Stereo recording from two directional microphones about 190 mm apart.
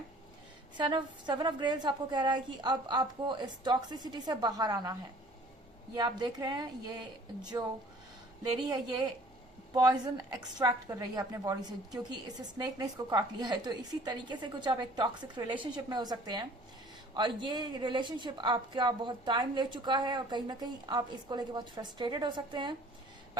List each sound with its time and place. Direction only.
0.8 s a woman's voice: 25° right (ahead or behind)
8.6 s a woman's voice: 25° right (ahead or behind)